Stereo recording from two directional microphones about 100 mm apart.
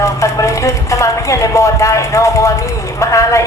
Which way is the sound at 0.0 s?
35° left (ahead or behind).